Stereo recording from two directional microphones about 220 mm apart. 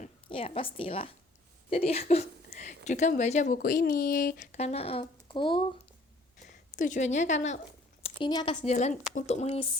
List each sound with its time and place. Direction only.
0.0 s a woman's voice: 25° left (ahead or behind); by 4.6 s 40° left (ahead or behind)
4.6 s speech: 25° left (ahead or behind)
6.7 s speech: 35° left (ahead or behind)
8.0 s speech: 20° left (ahead or behind)
8.6 s speech: 30° left (ahead or behind)